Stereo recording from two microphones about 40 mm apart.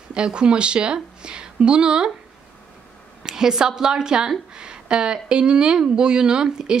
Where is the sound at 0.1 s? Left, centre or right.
Right.